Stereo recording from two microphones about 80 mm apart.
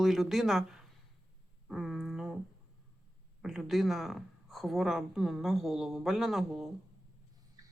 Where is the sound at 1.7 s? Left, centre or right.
Centre.